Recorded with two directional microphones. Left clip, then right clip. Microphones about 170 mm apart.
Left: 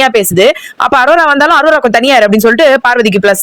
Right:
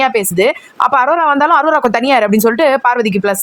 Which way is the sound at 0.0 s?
20° left (ahead or behind).